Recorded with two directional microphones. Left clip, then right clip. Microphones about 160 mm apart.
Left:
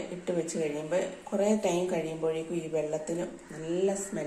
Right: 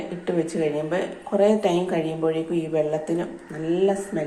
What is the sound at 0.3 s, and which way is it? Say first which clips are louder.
A woman's voice: right 7 dB; 15° right (ahead or behind).